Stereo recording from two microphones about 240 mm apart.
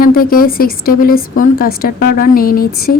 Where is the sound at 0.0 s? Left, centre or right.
Left.